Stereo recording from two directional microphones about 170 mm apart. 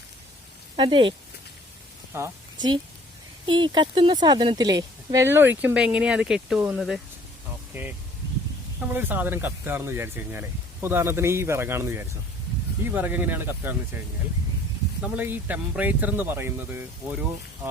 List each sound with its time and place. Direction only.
0.8 s speech: 30° right (ahead or behind)
2.1 s a woman's voice: 15° right (ahead or behind)
3.4 s a woman's voice: 30° right (ahead or behind); by 13.7 s 10° right (ahead or behind)
15.0 s a woman's voice: 10° right (ahead or behind)